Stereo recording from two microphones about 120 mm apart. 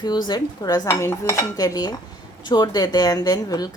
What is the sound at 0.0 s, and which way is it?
A woman's voice, 35° left (ahead or behind).